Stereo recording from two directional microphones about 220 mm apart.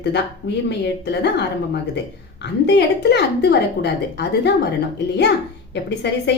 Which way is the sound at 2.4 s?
50° left (ahead or behind).